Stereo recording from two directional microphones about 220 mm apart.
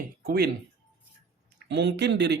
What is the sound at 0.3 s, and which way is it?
Speech, 45° right (ahead or behind).